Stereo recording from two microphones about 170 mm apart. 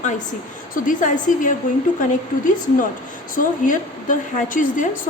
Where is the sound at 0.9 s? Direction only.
50° left (ahead or behind).